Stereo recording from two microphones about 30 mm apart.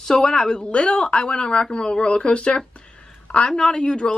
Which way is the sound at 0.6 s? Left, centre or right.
Left.